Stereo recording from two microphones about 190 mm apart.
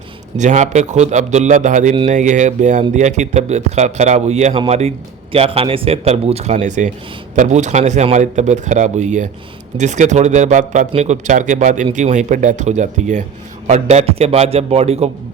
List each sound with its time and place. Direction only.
0.3 s a man's voice: 40° right (ahead or behind)